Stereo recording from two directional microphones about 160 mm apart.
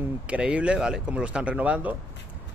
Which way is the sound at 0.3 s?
5° right (ahead or behind).